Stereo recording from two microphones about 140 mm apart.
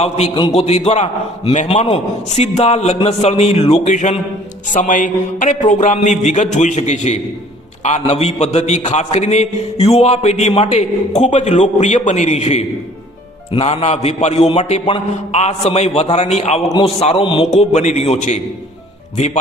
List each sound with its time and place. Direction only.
0.0 s a man's voice: 45° left (ahead or behind)
4.7 s a sound: 65° left (ahead or behind)
7.9 s a man's voice: 55° left (ahead or behind)